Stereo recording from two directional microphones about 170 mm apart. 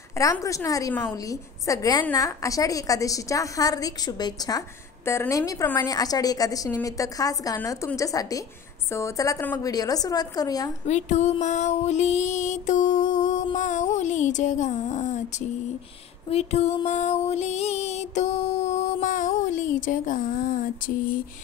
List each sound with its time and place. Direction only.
0.2 s a woman's voice: 20° left (ahead or behind)
10.9 s music: 45° left (ahead or behind)